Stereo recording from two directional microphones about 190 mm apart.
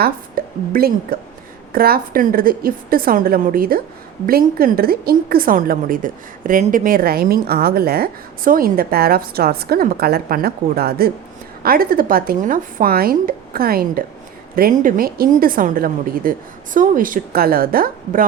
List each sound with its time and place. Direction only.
0.0 s a woman's voice: 50° right (ahead or behind)